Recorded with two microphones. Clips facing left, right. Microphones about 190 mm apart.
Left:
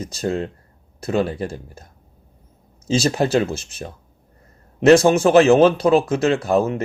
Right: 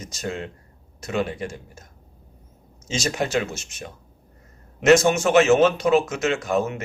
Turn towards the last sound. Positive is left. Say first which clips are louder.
# left 5 dB
turn(degrees=35)  # may be behind; listen again after turning